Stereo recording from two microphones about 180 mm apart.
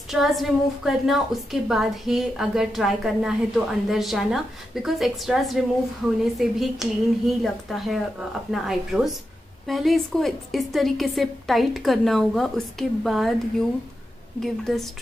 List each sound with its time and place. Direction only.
0.1 s a woman's voice: centre (ahead or behind)